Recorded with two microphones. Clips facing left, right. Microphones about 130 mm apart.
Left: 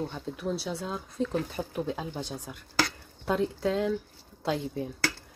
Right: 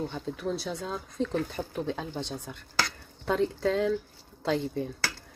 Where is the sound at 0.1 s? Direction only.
5° left (ahead or behind).